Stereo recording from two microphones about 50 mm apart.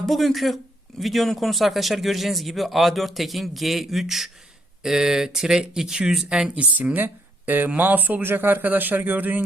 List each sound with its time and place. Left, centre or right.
0.0 s speech: centre
6.7 s speech: right